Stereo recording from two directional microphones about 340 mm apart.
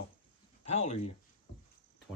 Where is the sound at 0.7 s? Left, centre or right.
Centre.